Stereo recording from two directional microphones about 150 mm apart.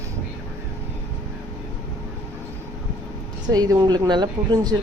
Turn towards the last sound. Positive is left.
turn(degrees=-30)  # may be behind; listen again after turning